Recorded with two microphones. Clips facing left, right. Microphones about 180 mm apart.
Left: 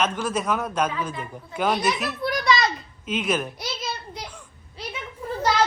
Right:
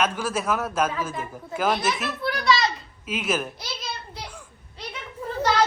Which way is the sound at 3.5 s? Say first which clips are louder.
Left 4 dB; 20° left (ahead or behind).